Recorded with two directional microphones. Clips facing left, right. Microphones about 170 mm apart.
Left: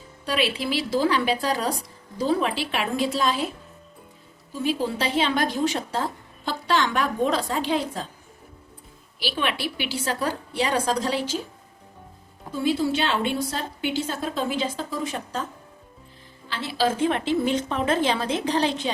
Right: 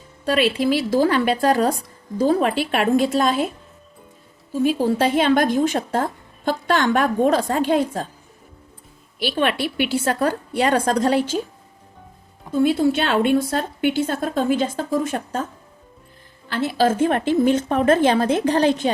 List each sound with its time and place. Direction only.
0.3 s a woman's voice: 50° right (ahead or behind)
4.5 s a woman's voice: 50° right (ahead or behind)
9.1 s a woman's voice: 50° right (ahead or behind)
12.5 s a woman's voice: 55° right (ahead or behind)
16.5 s a woman's voice: 50° right (ahead or behind)